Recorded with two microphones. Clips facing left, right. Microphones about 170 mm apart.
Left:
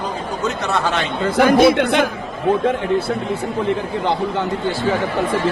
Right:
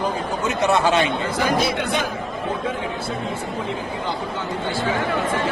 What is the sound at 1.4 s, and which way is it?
Speech, 60° left (ahead or behind).